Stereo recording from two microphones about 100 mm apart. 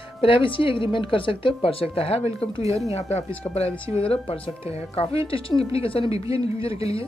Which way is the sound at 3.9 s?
70° left (ahead or behind).